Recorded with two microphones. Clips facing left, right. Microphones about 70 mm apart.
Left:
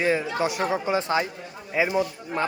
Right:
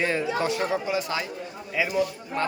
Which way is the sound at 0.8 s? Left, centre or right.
Left.